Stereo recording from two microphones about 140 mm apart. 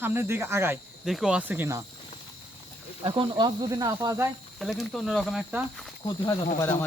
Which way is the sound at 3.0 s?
35° right (ahead or behind).